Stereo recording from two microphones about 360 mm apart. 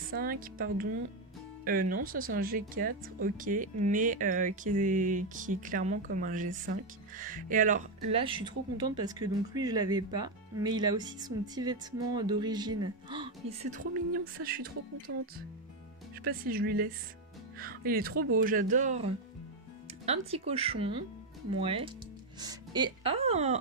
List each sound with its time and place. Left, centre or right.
0.1 s speech: right
16.3 s speech: right
20.1 s speech: centre